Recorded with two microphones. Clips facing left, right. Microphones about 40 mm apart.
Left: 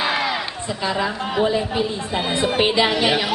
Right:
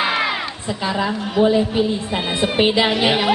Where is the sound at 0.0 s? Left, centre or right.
Centre.